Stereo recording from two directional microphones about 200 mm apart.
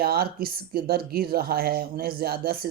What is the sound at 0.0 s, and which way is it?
Speech, 50° right (ahead or behind).